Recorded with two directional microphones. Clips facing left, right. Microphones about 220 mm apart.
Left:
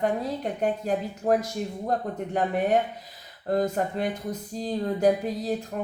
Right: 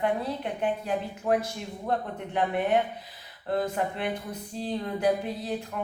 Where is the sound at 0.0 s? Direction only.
40° left (ahead or behind).